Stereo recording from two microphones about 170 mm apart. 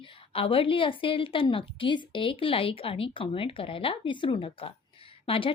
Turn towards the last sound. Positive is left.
turn(degrees=35)  # may be behind; listen again after turning